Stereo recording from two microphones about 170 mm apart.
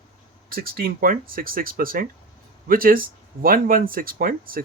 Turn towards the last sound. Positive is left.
turn(degrees=-55)  # may be behind; listen again after turning